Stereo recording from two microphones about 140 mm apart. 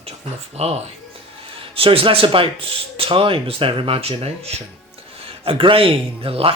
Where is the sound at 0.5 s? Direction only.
50° right (ahead or behind).